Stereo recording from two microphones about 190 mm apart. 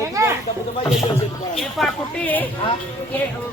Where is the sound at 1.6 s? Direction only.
Centre (ahead or behind).